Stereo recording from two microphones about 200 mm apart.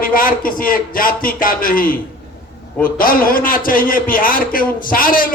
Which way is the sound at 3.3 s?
45° left (ahead or behind).